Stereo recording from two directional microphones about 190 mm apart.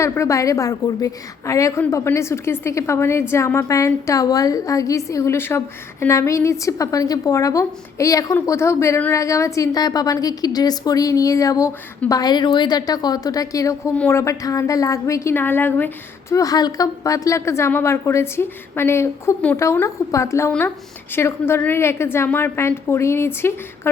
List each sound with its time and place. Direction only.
0.0 s a woman's voice: 15° left (ahead or behind)